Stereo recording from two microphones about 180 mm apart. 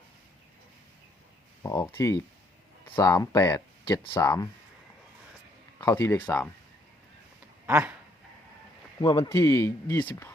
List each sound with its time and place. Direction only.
1.6 s speech: 15° left (ahead or behind)
5.8 s speech: 15° left (ahead or behind)
7.7 s dog: 10° right (ahead or behind)
9.0 s speech: 25° left (ahead or behind)